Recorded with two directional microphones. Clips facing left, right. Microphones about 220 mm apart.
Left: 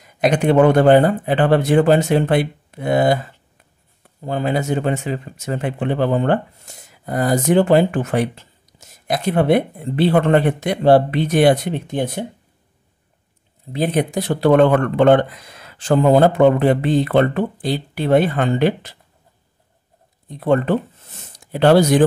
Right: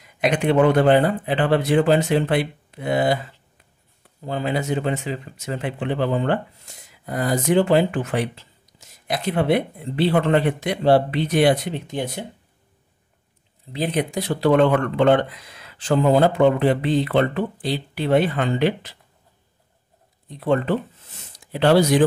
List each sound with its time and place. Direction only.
0.0 s speech: 45° left (ahead or behind)
4.3 s speech: 50° left (ahead or behind)
13.7 s speech: 50° left (ahead or behind)
20.2 s speech: 50° left (ahead or behind)